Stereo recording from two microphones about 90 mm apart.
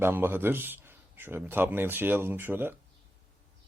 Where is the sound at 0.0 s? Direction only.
25° right (ahead or behind).